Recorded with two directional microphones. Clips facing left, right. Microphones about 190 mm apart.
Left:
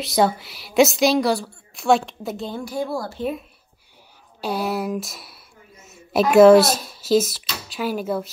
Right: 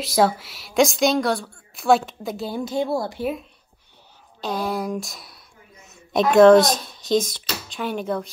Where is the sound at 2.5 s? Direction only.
25° right (ahead or behind).